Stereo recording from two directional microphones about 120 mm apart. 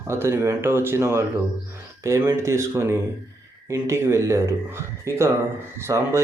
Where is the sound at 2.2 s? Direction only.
25° right (ahead or behind).